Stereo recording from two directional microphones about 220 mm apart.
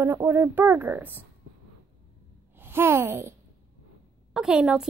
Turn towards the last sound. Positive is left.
turn(degrees=-5)  # may be behind; listen again after turning